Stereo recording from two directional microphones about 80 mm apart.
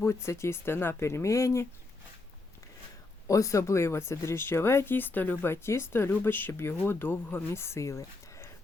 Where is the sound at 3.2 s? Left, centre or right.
Left.